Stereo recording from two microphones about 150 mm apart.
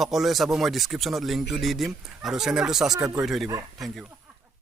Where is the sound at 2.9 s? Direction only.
20° right (ahead or behind).